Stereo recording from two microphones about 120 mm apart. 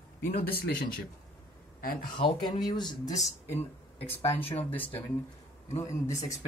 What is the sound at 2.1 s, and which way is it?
Speech, 40° left (ahead or behind).